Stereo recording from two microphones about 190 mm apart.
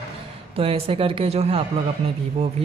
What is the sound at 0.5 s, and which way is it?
Speech, 30° right (ahead or behind).